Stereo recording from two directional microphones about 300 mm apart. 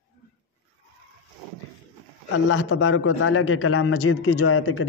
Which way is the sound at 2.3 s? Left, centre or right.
Left.